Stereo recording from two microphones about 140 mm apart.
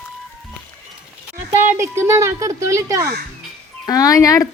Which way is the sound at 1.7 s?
20° right (ahead or behind).